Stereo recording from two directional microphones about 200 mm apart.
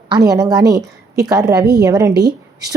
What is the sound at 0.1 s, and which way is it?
A woman's voice, 20° right (ahead or behind).